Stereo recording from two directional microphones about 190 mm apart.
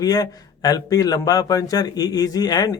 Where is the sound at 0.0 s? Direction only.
20° left (ahead or behind).